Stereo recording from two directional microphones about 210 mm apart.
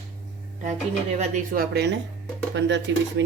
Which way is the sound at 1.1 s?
40° right (ahead or behind).